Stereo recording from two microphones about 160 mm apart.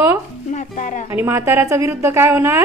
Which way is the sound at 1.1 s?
15° right (ahead or behind).